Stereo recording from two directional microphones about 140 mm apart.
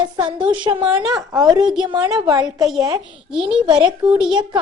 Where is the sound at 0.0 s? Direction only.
35° right (ahead or behind).